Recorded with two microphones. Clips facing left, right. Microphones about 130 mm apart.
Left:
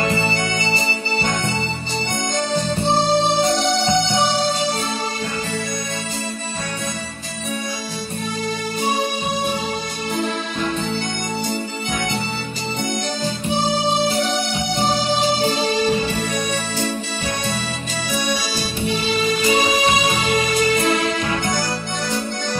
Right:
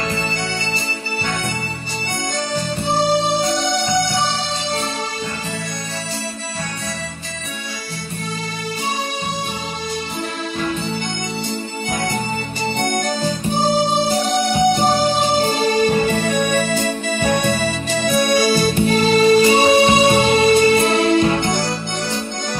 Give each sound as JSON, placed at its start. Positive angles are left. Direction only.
{"t": 0.1, "sound": "music", "side_deg": 25}
{"t": 4.0, "sound": "music", "side_deg": 20}
{"t": 12.7, "sound": "organ", "side_deg": -55}
{"t": 14.7, "sound": "music", "side_deg": -50}
{"t": 16.2, "sound": "music", "side_deg": -65}